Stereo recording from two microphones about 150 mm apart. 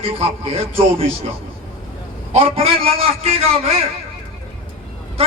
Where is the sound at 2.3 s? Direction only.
40° right (ahead or behind).